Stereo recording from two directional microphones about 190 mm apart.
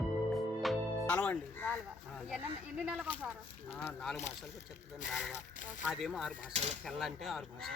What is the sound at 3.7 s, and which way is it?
Speech, 10° left (ahead or behind).